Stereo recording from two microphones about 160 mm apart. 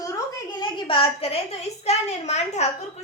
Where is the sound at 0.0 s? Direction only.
25° left (ahead or behind).